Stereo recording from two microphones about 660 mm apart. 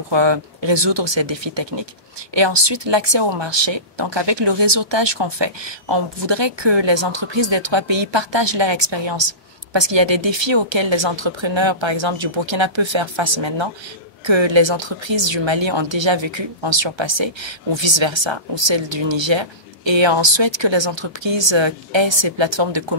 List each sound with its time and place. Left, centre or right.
0.1 s speech: right